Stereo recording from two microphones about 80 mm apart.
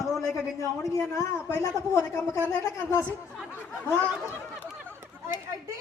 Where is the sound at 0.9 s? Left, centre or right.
Left.